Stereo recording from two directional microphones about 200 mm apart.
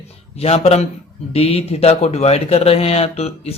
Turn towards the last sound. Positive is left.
turn(degrees=30)  # may be behind; listen again after turning